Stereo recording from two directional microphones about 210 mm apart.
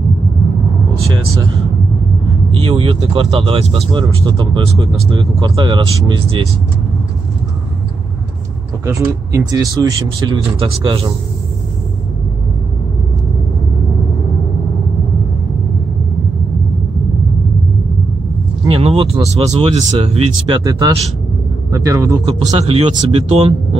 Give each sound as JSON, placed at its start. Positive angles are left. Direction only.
{"t": 1.0, "sound": "speech", "side_deg": -20}
{"t": 2.5, "sound": "speech", "side_deg": -25}
{"t": 8.8, "sound": "speech", "side_deg": -15}
{"t": 18.7, "sound": "speech", "side_deg": -25}